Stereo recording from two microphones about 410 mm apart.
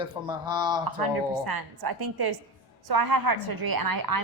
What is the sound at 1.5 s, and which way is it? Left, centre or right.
A woman's voice, right.